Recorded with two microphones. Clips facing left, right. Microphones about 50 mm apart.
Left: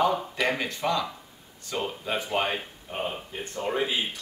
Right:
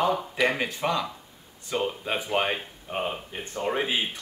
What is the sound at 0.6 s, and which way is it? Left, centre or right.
Speech, centre.